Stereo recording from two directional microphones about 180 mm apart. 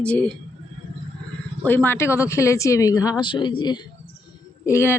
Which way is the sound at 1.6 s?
10° left (ahead or behind).